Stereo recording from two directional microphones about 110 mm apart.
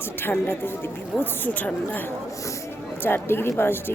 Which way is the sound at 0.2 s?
20° left (ahead or behind).